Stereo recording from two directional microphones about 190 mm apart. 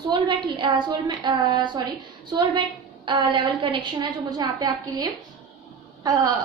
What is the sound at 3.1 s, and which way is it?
A woman's voice, 25° right (ahead or behind).